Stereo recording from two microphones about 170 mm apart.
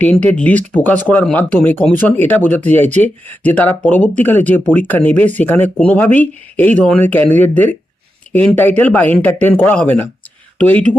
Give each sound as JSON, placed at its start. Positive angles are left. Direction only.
{"t": 0.0, "sound": "speech", "side_deg": 10}